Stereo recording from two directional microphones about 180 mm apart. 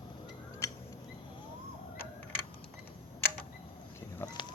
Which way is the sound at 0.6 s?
15° left (ahead or behind).